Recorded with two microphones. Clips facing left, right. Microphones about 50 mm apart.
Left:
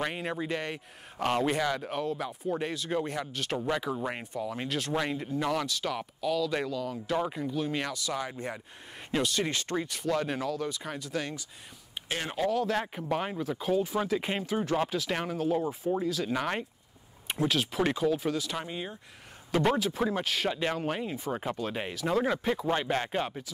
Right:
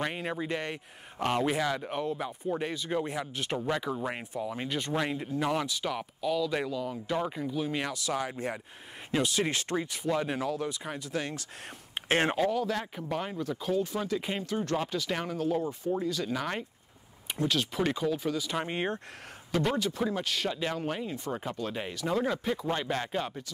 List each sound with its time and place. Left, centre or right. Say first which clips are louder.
0.0 s speech: even; centre
3.5 s speech: left 1 dB; centre
5.5 s speech: even; centre
7.2 s speech: left 1 dB; centre
7.9 s speech: right 1 dB; right
9.2 s speech: right 1 dB; centre
10.4 s speech: even; right
11.9 s a sound: right 8 dB; right
12.7 s speech: left 3 dB; left
13.4 s speech: left 1 dB; centre
16.3 s speech: left 2 dB; centre
18.7 s speech: right 6 dB; right
19.7 s speech: left 2 dB; centre